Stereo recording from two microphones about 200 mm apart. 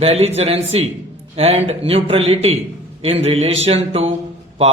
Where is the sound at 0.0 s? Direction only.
30° right (ahead or behind).